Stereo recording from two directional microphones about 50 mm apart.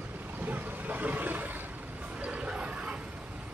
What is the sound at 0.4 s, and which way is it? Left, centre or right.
Vehicle, right.